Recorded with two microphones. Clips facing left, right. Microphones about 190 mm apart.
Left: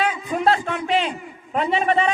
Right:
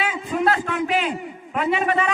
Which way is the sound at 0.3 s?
40° left (ahead or behind).